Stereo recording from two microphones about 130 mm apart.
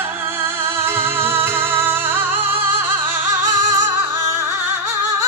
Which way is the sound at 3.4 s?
65° right (ahead or behind).